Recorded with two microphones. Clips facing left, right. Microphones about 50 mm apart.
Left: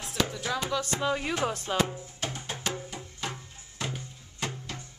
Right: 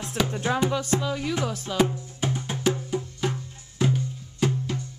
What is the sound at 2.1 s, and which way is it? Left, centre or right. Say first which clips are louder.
Music: right 7 dB; centre.